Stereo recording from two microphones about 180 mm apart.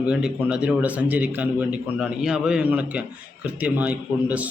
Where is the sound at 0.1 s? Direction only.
5° right (ahead or behind).